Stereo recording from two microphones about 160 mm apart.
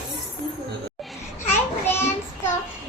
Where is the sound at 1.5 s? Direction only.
15° left (ahead or behind).